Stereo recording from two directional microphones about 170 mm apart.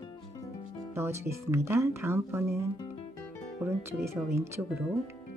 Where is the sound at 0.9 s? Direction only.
15° right (ahead or behind).